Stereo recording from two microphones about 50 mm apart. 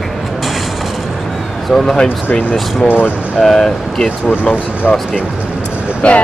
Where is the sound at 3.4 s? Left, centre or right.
Centre.